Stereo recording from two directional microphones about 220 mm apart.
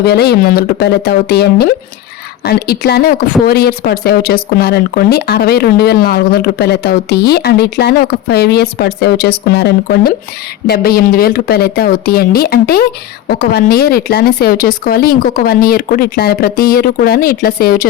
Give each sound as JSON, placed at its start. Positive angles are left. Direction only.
{"t": 0.0, "sound": "speech", "side_deg": 45}